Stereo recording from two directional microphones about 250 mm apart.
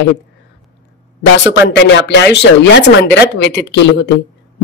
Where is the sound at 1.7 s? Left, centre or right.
Left.